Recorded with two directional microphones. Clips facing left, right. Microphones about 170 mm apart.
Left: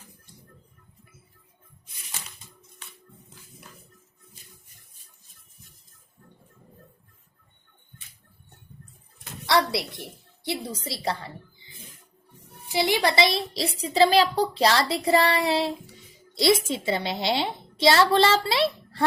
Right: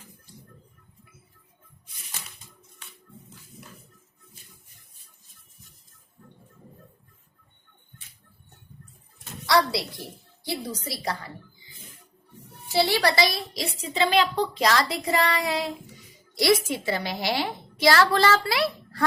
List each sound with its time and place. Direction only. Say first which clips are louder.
9.5 s a woman's voice: right 1 dB; 25° left (ahead or behind)
12.6 s a woman's voice: right 1 dB; 15° left (ahead or behind)